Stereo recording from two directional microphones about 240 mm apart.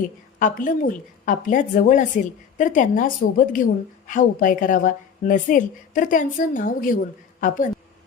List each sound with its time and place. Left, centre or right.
0.3 s a woman's voice: left